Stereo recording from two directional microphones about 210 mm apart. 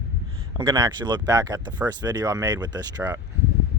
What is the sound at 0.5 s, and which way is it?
Speech, 20° right (ahead or behind).